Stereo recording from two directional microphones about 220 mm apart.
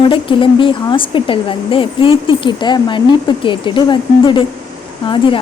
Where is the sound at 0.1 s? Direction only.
25° left (ahead or behind).